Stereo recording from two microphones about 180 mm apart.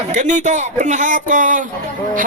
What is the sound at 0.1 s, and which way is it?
A man's voice, 45° right (ahead or behind).